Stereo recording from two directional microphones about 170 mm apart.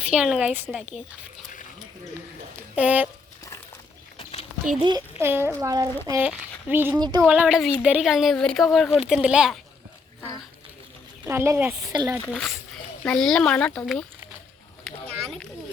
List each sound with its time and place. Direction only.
0.0 s a woman's voice: 5° right (ahead or behind)
2.7 s a woman's voice: 10° right (ahead or behind)
4.2 s a sound: 35° left (ahead or behind)
4.8 s speech: 25° right (ahead or behind)
5.2 s a woman's voice: 15° right (ahead or behind)
6.2 s a woman's voice: 10° right (ahead or behind)
11.3 s a woman's voice: 15° right (ahead or behind)
12.3 s speech: 5° left (ahead or behind)